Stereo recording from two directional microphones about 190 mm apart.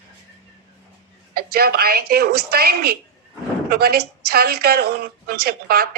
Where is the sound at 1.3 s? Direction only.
55° right (ahead or behind).